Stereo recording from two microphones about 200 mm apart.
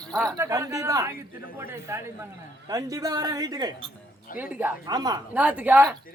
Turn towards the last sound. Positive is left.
turn(degrees=-10)  # may be behind; listen again after turning